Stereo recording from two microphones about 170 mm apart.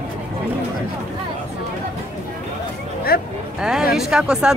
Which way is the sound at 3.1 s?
60° left (ahead or behind).